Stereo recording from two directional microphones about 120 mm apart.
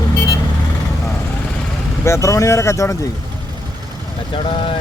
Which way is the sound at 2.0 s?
25° left (ahead or behind).